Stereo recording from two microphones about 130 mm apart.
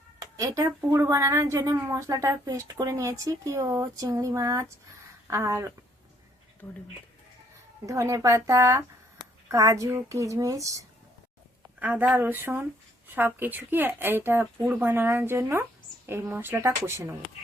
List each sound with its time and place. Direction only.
0.2 s speech: 25° right (ahead or behind)
6.6 s speech: 15° left (ahead or behind)
7.9 s speech: 25° right (ahead or behind)
11.8 s speech: 10° right (ahead or behind)